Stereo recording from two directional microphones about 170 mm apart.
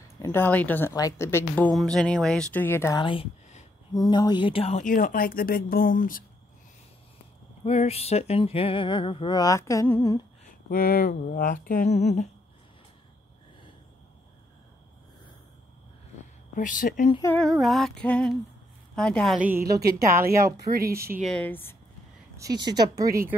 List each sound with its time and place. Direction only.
0.2 s a woman's voice: 15° left (ahead or behind)
1.7 s speech: centre (ahead or behind)
3.0 s speech: 30° left (ahead or behind)
4.9 s speech: 55° left (ahead or behind)
7.6 s a sound: 40° left (ahead or behind); by 10.2 s 15° left (ahead or behind)
10.7 s speech: 60° left (ahead or behind); by 12.3 s 40° left (ahead or behind)
16.5 s speech: 50° left (ahead or behind)
17.2 s speech: 5° left (ahead or behind)
20.7 s speech: 60° right (ahead or behind)
21.2 s a woman's voice: 5° left (ahead or behind)
22.4 s speech: 25° right (ahead or behind)